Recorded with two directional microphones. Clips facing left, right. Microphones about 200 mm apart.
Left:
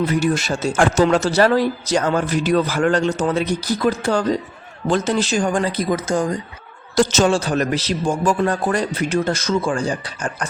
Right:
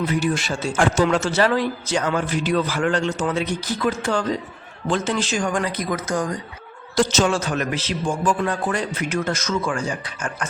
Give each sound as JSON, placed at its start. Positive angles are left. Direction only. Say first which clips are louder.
{"t": 0.0, "sound": "a man's voice", "louder": "left 3 dB", "side_deg": 40}
{"t": 6.9, "sound": "a man's voice", "louder": "left 3 dB", "side_deg": 45}
{"t": 7.3, "sound": "a man's voice", "louder": "left 4 dB", "side_deg": 35}